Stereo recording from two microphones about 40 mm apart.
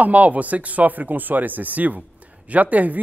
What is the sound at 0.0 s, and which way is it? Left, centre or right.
Speech, right.